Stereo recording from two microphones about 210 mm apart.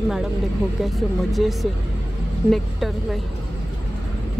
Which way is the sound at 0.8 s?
Centre (ahead or behind).